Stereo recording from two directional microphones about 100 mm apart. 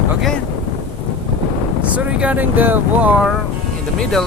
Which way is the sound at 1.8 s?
15° right (ahead or behind).